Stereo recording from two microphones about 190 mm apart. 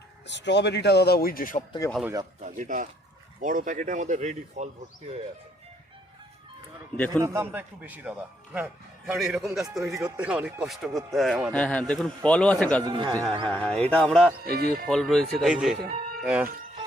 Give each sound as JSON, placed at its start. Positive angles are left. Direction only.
{"t": 0.3, "sound": "speech", "side_deg": 65}
{"t": 2.4, "sound": "speech", "side_deg": -45}
{"t": 6.9, "sound": "a man's voice", "side_deg": 10}
{"t": 7.2, "sound": "a man's voice", "side_deg": -15}
{"t": 12.8, "sound": "speech", "side_deg": -20}
{"t": 13.5, "sound": "speech", "side_deg": 5}
{"t": 14.4, "sound": "speech", "side_deg": -55}
{"t": 14.8, "sound": "speech", "side_deg": 0}
{"t": 15.9, "sound": "chicken", "side_deg": -40}
{"t": 16.2, "sound": "speech", "side_deg": -5}